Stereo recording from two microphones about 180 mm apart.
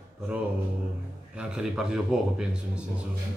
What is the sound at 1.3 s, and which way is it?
A man's voice, 5° right (ahead or behind).